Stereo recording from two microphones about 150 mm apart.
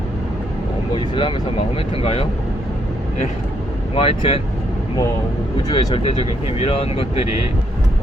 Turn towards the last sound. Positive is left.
turn(degrees=40)  # may be behind; listen again after turning